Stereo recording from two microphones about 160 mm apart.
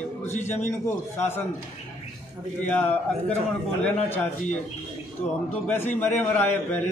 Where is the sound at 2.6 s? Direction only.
10° left (ahead or behind).